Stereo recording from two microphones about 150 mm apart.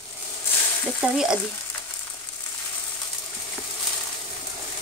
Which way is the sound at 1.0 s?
5° right (ahead or behind).